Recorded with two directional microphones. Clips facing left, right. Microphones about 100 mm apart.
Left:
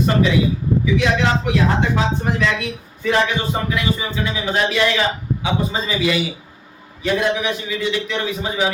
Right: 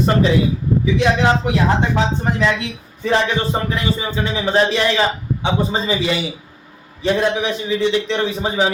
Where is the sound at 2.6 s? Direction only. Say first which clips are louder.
Left 1 dB; 30° right (ahead or behind).